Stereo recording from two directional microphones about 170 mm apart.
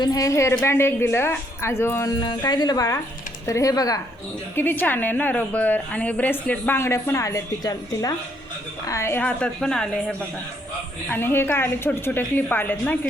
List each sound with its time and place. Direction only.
0.0 s a woman's voice: 20° left (ahead or behind)
2.2 s speech: 25° left (ahead or behind)
4.5 s a woman's voice: 10° left (ahead or behind)